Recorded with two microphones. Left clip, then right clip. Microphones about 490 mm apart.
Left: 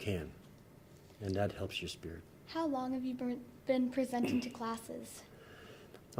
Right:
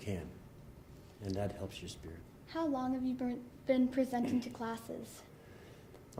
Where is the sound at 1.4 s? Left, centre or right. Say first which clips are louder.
Left 6 dB; left.